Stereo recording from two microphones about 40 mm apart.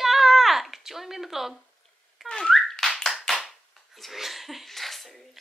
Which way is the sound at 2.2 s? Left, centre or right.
Centre.